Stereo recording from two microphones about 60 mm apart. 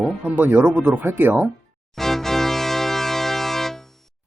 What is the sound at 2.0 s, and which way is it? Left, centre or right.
Music, centre.